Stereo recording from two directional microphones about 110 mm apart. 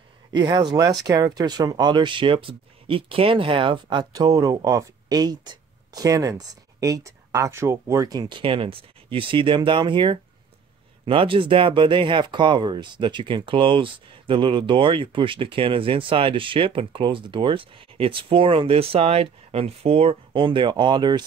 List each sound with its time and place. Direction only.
0.3 s speech: 35° right (ahead or behind)
4.1 s speech: 35° right (ahead or behind)